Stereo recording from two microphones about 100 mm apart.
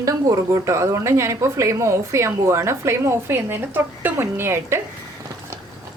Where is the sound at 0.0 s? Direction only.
35° right (ahead or behind).